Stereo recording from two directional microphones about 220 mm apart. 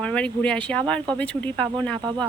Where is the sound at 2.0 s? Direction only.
20° right (ahead or behind).